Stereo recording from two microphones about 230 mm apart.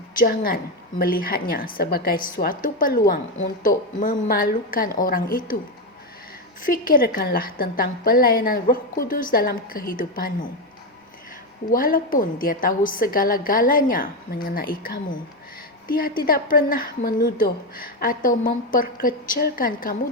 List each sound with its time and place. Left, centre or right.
0.2 s a woman's voice: left
6.6 s a woman's voice: left
11.7 s a woman's voice: left